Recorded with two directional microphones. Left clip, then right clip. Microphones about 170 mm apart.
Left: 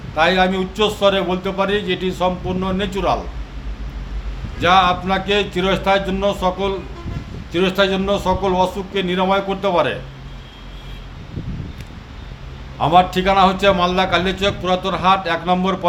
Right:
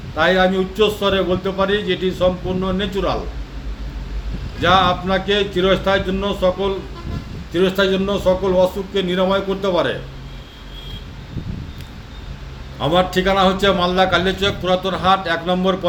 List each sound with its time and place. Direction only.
0.2 s a man's voice: 20° left (ahead or behind)
4.6 s a man's voice: 20° left (ahead or behind)
12.8 s a man's voice: 20° left (ahead or behind)